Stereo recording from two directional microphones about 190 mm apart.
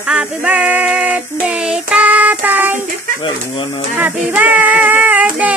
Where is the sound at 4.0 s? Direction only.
10° right (ahead or behind).